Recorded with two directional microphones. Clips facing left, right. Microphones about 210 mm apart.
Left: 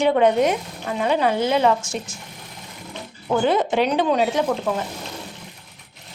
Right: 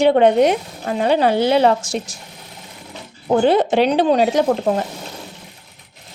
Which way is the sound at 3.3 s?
35° right (ahead or behind).